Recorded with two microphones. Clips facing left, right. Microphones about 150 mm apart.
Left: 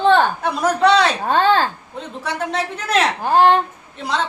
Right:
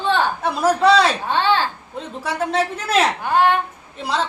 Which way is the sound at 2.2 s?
5° right (ahead or behind).